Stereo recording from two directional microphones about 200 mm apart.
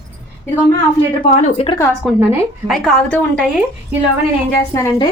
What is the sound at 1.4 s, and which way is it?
Speech, 30° left (ahead or behind).